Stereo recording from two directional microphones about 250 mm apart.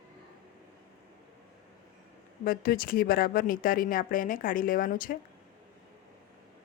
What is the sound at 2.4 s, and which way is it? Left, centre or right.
A woman's voice, left.